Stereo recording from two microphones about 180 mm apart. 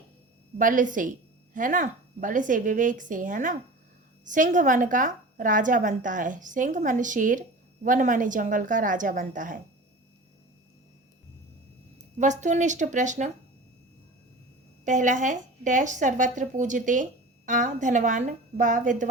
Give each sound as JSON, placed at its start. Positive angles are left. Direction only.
{"t": 0.6, "sound": "speech", "side_deg": -45}
{"t": 12.1, "sound": "speech", "side_deg": -40}
{"t": 14.8, "sound": "speech", "side_deg": -45}